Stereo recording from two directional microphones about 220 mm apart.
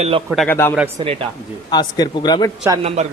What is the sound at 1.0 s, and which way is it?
Speech, 25° right (ahead or behind).